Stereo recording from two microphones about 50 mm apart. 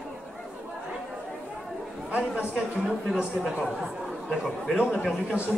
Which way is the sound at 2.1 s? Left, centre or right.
Right.